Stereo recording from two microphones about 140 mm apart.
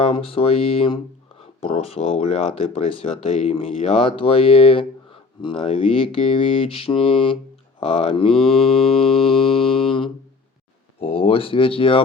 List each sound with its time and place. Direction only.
0.0 s speech: 40° left (ahead or behind)
8.3 s mantra: centre (ahead or behind)
11.0 s speech: 40° left (ahead or behind)